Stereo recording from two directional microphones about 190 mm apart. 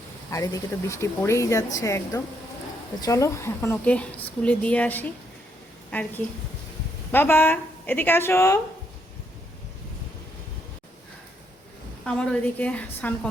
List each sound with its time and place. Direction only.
0.3 s speech: 15° left (ahead or behind)
12.0 s speech: 5° left (ahead or behind)